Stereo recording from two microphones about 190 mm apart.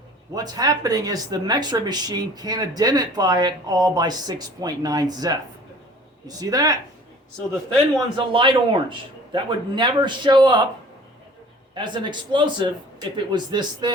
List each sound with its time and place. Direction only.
0.3 s speech: 20° right (ahead or behind)
8.3 s speech: 25° right (ahead or behind)
11.7 s speech: 25° right (ahead or behind)